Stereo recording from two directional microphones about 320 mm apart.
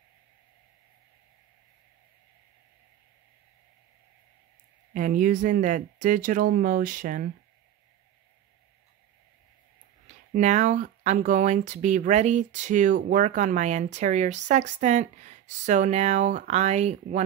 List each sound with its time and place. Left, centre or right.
4.9 s speech: right
10.0 s speech: right